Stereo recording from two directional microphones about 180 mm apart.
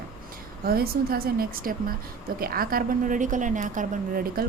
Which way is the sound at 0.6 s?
55° right (ahead or behind).